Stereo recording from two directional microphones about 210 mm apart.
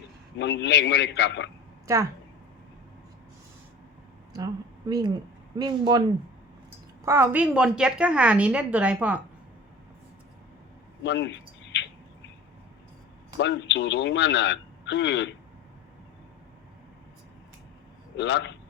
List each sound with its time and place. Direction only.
0.3 s speech: 55° left (ahead or behind)
4.4 s speech: 20° right (ahead or behind)
7.0 s a woman's voice: 10° right (ahead or behind)
11.0 s a sound: 55° left (ahead or behind)
13.4 s speech: 55° left (ahead or behind)
18.2 s speech: 55° left (ahead or behind)